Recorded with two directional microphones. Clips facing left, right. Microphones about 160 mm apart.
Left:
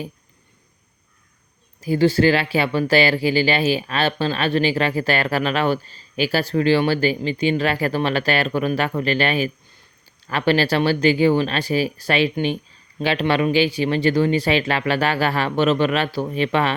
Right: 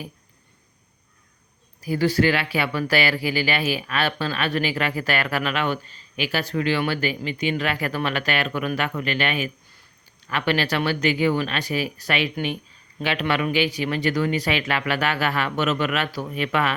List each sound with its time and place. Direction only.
1.8 s speech: 25° left (ahead or behind)